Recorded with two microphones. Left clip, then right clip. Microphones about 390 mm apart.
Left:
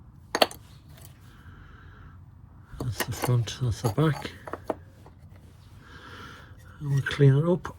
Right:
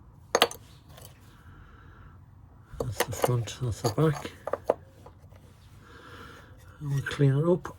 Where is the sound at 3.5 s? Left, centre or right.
Centre.